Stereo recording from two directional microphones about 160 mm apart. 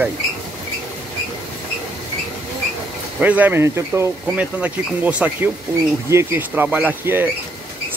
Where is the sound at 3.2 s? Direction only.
10° right (ahead or behind).